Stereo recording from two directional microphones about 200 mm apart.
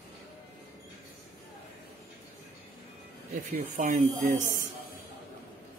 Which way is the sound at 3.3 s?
45° right (ahead or behind).